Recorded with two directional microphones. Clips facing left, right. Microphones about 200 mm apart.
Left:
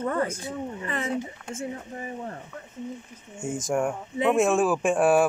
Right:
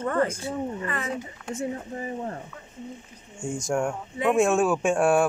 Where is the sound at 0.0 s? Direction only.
10° left (ahead or behind).